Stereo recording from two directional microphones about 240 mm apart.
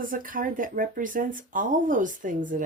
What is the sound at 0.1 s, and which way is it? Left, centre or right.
Speech, right.